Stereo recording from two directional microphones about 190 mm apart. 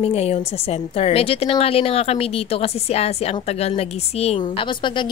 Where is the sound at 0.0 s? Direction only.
35° left (ahead or behind).